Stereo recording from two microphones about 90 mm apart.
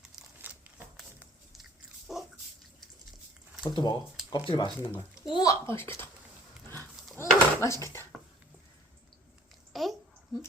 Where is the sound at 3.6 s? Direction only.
55° left (ahead or behind).